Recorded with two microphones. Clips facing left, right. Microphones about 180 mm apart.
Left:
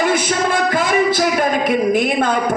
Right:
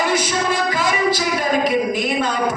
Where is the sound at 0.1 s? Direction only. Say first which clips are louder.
Left 2 dB; 55° left (ahead or behind).